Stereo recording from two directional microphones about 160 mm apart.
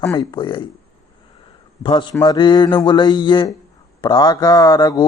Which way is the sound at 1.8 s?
30° left (ahead or behind).